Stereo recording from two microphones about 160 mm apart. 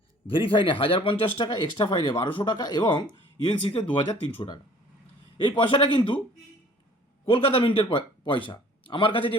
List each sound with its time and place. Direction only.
0.3 s speech: 35° left (ahead or behind)
5.4 s speech: 30° left (ahead or behind)
7.3 s speech: 35° left (ahead or behind)